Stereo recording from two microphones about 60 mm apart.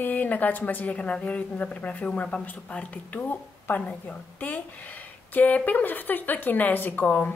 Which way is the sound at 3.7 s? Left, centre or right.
Left.